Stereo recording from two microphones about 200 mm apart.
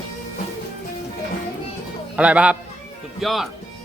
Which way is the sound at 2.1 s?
5° right (ahead or behind).